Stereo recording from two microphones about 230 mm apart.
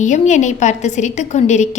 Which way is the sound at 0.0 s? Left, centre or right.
Left.